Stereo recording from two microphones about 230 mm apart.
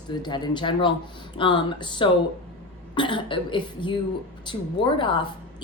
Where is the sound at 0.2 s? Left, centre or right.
Centre.